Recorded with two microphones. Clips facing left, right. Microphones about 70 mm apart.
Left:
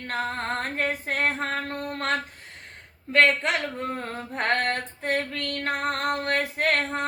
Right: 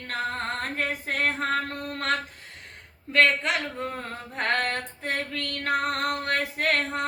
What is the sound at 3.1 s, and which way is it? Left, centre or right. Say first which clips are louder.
Female singing: left 1 dB; left.